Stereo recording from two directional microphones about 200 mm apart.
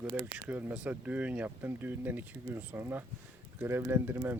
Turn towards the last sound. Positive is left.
turn(degrees=-10)  # may be behind; listen again after turning